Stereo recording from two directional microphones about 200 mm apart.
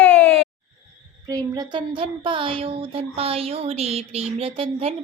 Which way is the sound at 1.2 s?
20° right (ahead or behind).